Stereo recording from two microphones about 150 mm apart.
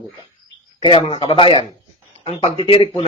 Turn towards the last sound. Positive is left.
turn(degrees=35)  # may be behind; listen again after turning